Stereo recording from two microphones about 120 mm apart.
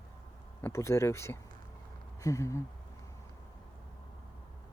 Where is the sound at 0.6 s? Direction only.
25° left (ahead or behind).